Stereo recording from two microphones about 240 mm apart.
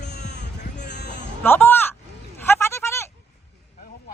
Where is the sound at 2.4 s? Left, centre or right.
Centre.